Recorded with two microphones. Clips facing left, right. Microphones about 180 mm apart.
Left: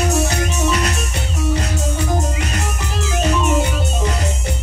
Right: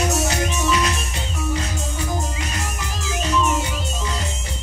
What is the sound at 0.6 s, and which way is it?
Music, 40° left (ahead or behind).